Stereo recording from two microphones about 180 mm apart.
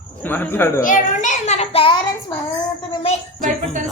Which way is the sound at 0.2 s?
10° left (ahead or behind).